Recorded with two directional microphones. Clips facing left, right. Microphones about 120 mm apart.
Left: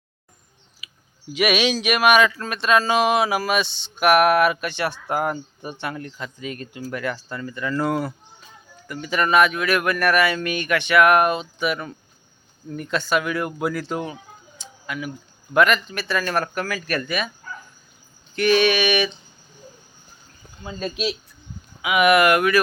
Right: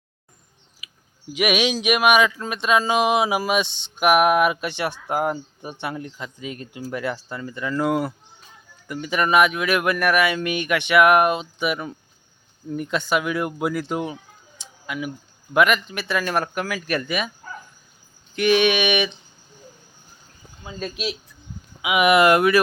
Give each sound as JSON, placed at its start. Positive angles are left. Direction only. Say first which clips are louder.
{"t": 1.3, "sound": "speech", "louder": "left 1 dB", "side_deg": -15}
{"t": 18.3, "sound": "speech", "louder": "even", "side_deg": -15}
{"t": 20.7, "sound": "speech", "louder": "left 3 dB", "side_deg": -5}
{"t": 21.8, "sound": "speech", "louder": "even", "side_deg": -20}